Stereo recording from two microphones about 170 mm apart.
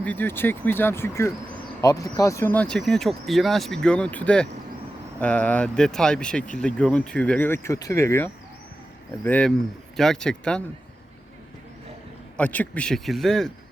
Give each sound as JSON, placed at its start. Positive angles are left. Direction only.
{"t": 0.0, "sound": "speech", "side_deg": 10}
{"t": 12.4, "sound": "speech", "side_deg": 10}